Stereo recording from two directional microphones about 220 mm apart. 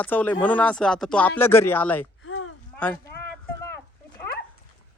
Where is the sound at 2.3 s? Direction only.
70° left (ahead or behind).